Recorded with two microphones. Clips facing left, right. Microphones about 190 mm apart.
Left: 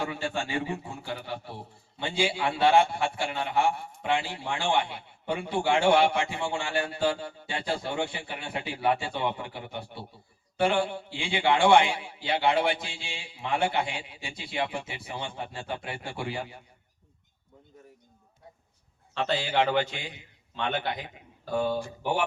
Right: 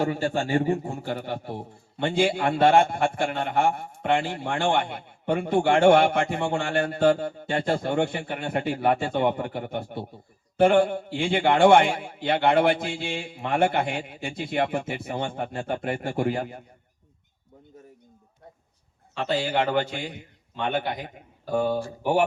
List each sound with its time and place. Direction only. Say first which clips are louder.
0.0 s a man's voice: right 6 dB; 45° right (ahead or behind)
19.2 s a man's voice: right 2 dB; 50° right (ahead or behind)